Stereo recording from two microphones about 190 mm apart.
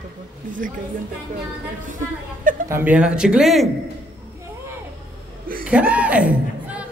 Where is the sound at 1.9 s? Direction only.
45° right (ahead or behind).